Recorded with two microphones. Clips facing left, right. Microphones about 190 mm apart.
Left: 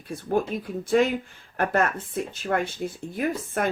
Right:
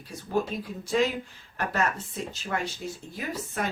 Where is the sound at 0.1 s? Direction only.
55° left (ahead or behind).